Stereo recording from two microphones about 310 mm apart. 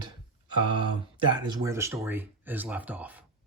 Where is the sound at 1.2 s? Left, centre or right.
Centre.